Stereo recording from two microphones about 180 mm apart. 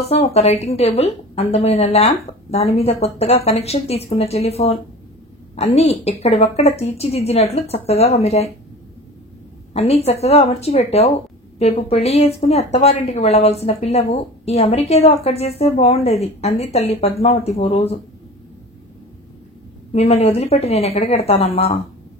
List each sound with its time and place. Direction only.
0.0 s speech: 35° left (ahead or behind)
9.8 s speech: 35° left (ahead or behind)
19.9 s speech: 35° left (ahead or behind)